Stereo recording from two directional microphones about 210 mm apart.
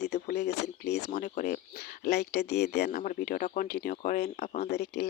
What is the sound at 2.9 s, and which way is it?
Speech, 40° left (ahead or behind).